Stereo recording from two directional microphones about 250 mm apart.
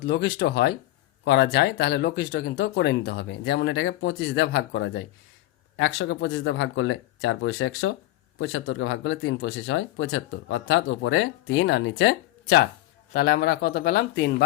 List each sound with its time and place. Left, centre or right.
0.0 s speech: left